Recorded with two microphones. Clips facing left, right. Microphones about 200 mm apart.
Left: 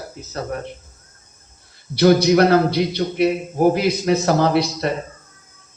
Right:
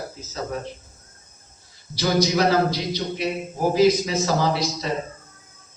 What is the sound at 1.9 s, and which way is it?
A man's voice, 60° left (ahead or behind).